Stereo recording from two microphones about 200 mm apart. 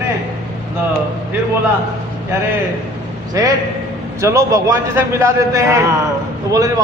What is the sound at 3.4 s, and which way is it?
A man's voice, 20° right (ahead or behind).